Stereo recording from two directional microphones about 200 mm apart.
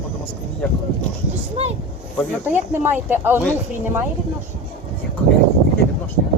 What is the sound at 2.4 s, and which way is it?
Speech, 10° right (ahead or behind).